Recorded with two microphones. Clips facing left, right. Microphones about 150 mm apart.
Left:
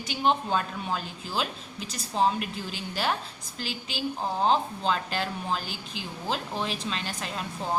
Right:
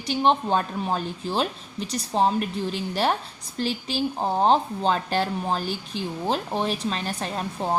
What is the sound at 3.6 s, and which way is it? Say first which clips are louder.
A woman's voice: right 8 dB; 35° right (ahead or behind).